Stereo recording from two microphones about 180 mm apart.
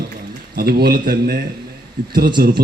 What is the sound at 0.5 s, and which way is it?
A man's voice, 60° right (ahead or behind).